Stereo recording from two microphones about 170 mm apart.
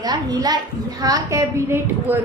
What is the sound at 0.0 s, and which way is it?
A child's voice, 25° right (ahead or behind).